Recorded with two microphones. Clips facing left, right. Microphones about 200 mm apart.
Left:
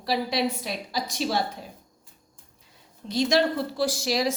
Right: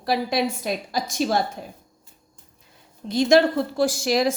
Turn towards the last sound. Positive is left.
turn(degrees=-50)  # may be behind; listen again after turning